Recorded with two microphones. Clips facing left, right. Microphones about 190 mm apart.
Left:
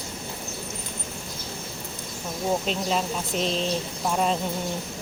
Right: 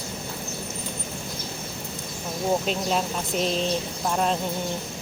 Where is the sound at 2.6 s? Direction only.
5° right (ahead or behind).